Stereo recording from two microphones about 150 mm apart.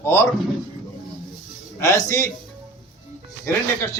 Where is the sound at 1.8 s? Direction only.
15° left (ahead or behind).